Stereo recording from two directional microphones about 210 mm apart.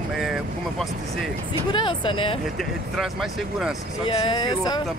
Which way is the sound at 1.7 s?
25° left (ahead or behind).